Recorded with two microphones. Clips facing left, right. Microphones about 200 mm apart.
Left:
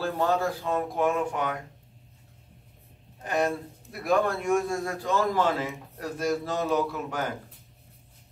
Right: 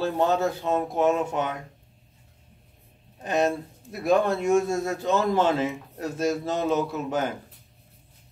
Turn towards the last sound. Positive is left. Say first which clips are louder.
# right 2 dB
turn(degrees=-25)  # may be behind; listen again after turning